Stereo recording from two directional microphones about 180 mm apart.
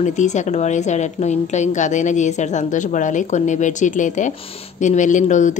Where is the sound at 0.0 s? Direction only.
40° left (ahead or behind).